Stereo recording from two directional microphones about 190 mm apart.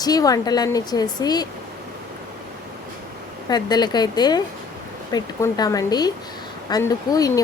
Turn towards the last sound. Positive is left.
turn(degrees=20)  # may be behind; listen again after turning